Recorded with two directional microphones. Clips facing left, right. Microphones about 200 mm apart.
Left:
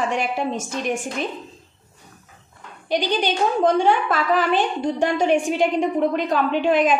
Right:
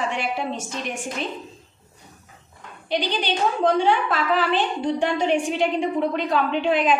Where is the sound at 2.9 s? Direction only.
45° left (ahead or behind).